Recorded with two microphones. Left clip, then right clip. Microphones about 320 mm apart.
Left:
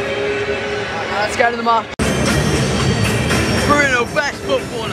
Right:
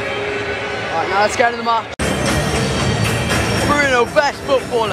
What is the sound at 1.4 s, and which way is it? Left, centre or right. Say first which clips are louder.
Speech: left 1 dB; centre.